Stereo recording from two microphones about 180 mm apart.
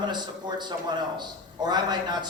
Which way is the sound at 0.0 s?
25° right (ahead or behind).